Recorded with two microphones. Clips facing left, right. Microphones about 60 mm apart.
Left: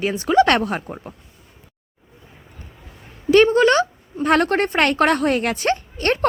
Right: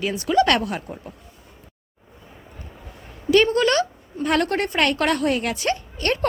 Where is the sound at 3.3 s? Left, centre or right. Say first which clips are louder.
Left 4 dB; left.